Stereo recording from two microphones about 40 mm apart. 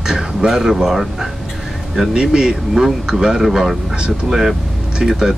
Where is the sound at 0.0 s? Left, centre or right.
Centre.